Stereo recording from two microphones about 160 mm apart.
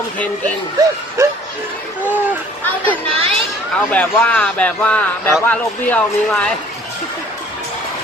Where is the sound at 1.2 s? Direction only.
15° right (ahead or behind).